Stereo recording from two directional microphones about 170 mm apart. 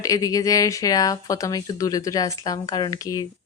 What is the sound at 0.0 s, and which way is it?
Speech, 20° left (ahead or behind).